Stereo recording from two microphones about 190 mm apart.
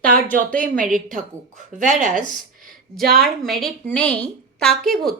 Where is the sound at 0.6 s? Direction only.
45° right (ahead or behind).